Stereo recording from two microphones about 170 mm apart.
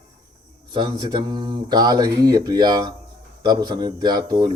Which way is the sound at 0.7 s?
25° right (ahead or behind).